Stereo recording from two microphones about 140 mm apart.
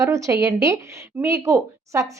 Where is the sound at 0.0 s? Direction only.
20° right (ahead or behind).